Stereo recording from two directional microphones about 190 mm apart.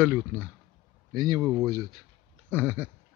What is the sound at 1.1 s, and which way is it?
Speech, 20° right (ahead or behind).